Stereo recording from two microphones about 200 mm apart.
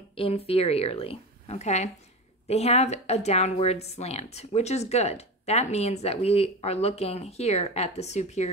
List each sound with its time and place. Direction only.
0.2 s speech: 30° left (ahead or behind)